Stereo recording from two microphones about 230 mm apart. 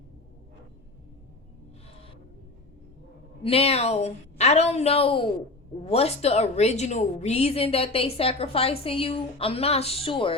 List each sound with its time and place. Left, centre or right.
3.4 s a woman's voice: left